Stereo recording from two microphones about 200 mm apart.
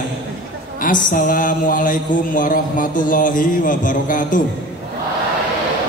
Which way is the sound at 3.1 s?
40° left (ahead or behind).